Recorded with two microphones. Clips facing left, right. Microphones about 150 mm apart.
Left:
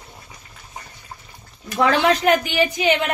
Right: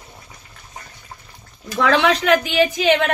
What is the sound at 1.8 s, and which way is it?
A woman's voice, 90° right.